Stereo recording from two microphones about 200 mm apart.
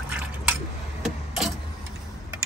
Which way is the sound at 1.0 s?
Centre (ahead or behind).